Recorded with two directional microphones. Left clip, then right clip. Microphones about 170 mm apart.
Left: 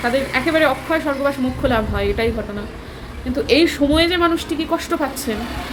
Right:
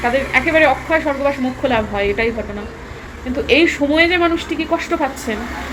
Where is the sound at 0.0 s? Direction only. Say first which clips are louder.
Right 3 dB; 15° left (ahead or behind).